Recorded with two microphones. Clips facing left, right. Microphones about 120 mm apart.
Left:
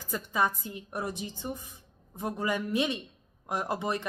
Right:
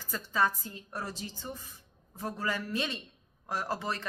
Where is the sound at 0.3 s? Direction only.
15° left (ahead or behind).